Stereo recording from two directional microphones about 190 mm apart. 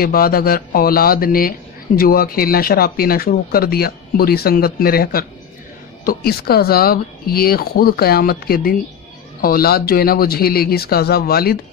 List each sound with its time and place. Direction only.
0.0 s speech: 50° left (ahead or behind)